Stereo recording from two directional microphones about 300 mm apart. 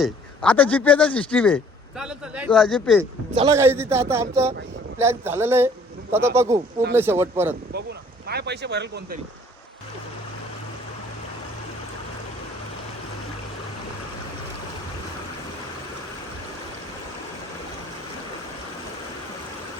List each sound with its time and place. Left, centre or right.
0.0 s a man's voice: centre
3.0 s a man's voice: centre
8.3 s speech: right